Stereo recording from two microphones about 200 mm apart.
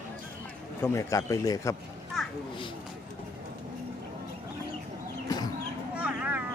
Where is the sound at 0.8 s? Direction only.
15° left (ahead or behind).